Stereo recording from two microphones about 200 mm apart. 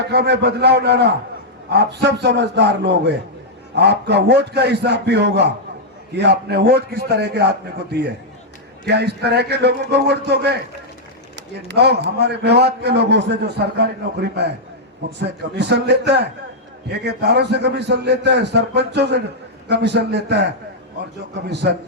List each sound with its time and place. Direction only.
0.0 s a man's voice: 55° right (ahead or behind)